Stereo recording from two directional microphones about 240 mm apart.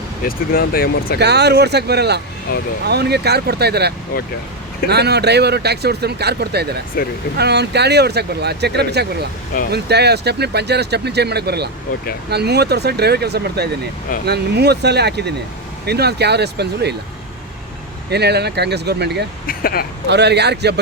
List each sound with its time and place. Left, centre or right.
0.3 s speech: left
1.2 s speech: right
2.5 s speech: left
2.8 s speech: right
18.1 s speech: right
19.5 s speech: left
20.1 s speech: right